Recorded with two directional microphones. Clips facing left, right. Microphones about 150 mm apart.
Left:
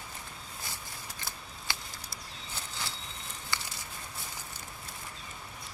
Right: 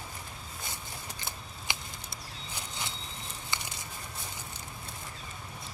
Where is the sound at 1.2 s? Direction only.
20° right (ahead or behind).